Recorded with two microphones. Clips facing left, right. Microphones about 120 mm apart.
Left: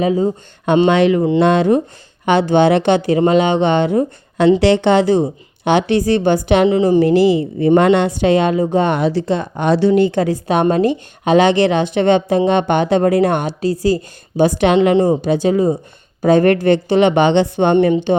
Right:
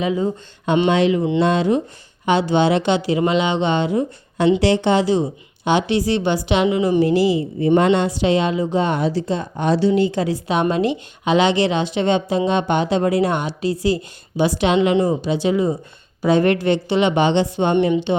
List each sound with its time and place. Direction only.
0.0 s a woman's voice: 35° left (ahead or behind)
0.9 s a woman's voice: 60° left (ahead or behind)
6.7 s a woman's voice: 35° left (ahead or behind)
7.0 s a woman's voice: 60° left (ahead or behind)
14.9 s a woman's voice: 35° left (ahead or behind)
15.2 s speech: 45° left (ahead or behind)
17.9 s speech: 45° left (ahead or behind)